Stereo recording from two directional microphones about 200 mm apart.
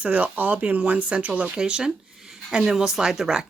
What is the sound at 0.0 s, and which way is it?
Speech, 5° right (ahead or behind).